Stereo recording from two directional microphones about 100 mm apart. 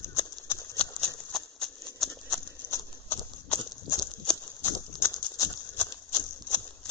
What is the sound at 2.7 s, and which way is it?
Horse, 20° left (ahead or behind).